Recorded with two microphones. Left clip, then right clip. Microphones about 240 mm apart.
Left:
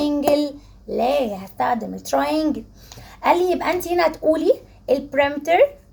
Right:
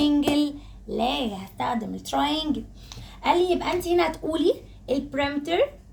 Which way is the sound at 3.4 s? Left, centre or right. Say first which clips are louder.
Left 4 dB; centre.